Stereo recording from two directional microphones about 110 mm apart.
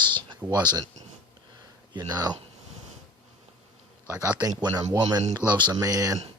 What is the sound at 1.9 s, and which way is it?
Speech, 35° right (ahead or behind).